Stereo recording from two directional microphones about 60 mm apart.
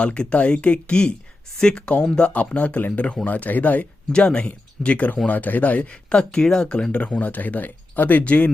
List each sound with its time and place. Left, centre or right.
0.0 s speech: centre
4.1 s speech: centre